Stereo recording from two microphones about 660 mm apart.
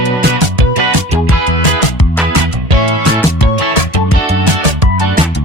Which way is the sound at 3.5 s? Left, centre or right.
Left.